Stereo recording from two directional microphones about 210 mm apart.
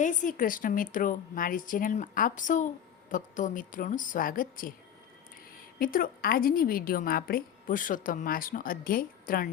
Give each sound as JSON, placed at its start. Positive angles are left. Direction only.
{"t": 0.0, "sound": "a woman's voice", "side_deg": 35}
{"t": 5.8, "sound": "a woman's voice", "side_deg": 40}